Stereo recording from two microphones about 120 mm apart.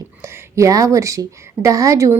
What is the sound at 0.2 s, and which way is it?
A woman's voice, 20° right (ahead or behind).